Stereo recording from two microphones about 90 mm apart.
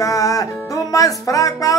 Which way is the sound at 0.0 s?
40° left (ahead or behind).